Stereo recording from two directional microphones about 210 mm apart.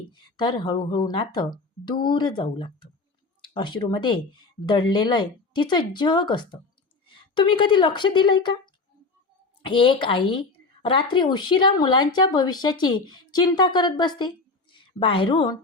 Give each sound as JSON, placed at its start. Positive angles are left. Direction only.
{"t": 0.1, "sound": "speech", "side_deg": 20}
{"t": 9.6, "sound": "a woman's voice", "side_deg": 25}